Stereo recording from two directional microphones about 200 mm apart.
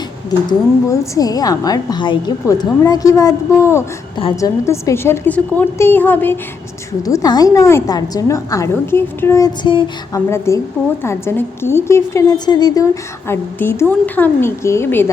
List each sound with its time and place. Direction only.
0.3 s a woman's voice: 15° left (ahead or behind)